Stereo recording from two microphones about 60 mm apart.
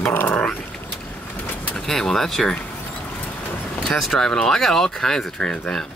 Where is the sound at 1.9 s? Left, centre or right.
Centre.